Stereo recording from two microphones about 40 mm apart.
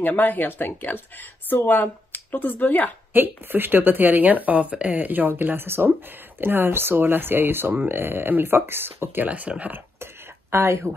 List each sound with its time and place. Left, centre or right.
0.2 s speech: left
3.1 s speech: right
5.7 s speech: right
6.4 s speech: right
9.2 s speech: right
10.5 s speech: right